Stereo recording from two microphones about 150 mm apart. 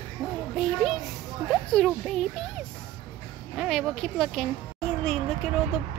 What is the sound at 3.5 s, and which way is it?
A woman's voice, centre (ahead or behind).